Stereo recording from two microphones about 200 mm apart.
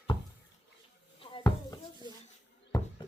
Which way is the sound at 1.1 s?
20° left (ahead or behind).